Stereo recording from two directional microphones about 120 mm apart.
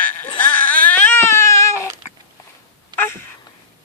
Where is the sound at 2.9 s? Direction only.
40° right (ahead or behind).